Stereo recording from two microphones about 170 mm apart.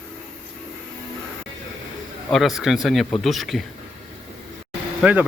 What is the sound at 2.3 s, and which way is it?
Speech, centre (ahead or behind).